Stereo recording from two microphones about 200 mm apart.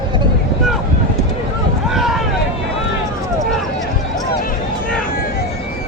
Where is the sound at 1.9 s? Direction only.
Centre (ahead or behind).